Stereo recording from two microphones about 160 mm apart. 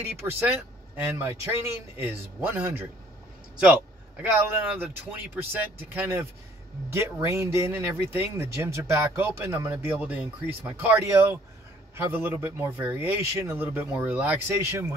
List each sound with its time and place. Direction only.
0.4 s speech: 10° right (ahead or behind)
4.2 s speech: 10° right (ahead or behind)